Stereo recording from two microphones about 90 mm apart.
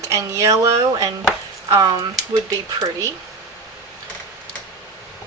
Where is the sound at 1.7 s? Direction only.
45° right (ahead or behind).